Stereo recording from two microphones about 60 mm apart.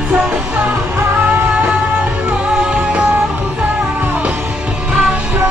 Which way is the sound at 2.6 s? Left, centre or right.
Centre.